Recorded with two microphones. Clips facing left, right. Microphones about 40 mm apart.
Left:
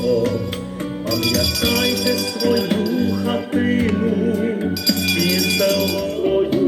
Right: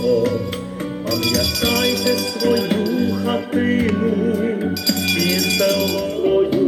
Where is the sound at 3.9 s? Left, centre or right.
Right.